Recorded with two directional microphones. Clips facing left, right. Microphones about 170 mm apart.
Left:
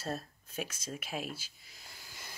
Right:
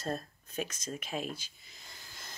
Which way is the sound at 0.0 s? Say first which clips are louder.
Right 2 dB; 5° left (ahead or behind).